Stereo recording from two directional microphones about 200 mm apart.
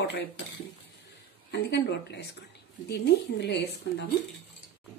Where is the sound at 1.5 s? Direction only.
55° left (ahead or behind).